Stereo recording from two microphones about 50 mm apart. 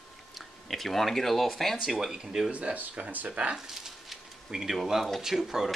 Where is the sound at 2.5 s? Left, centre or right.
Right.